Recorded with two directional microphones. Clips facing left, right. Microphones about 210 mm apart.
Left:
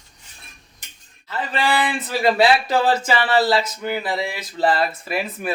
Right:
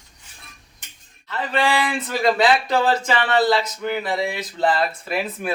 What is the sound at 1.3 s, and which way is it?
Speech, 5° left (ahead or behind).